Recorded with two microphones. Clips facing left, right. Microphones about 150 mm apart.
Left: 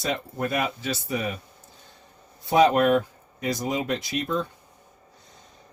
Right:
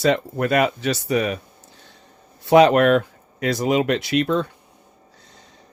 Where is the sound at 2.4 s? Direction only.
75° right (ahead or behind).